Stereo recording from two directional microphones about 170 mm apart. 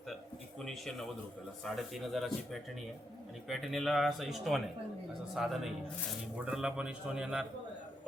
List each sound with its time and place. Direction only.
0.6 s speech: centre (ahead or behind)